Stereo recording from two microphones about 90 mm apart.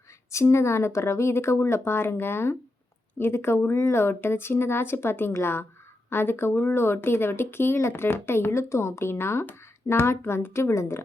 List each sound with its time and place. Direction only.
0.3 s speech: 35° left (ahead or behind)